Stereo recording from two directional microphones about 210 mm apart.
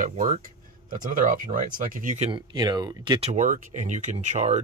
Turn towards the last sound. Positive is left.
turn(degrees=-35)  # may be behind; listen again after turning